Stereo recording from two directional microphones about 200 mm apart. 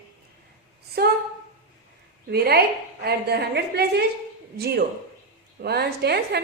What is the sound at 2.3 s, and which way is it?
A woman's voice, 50° right (ahead or behind).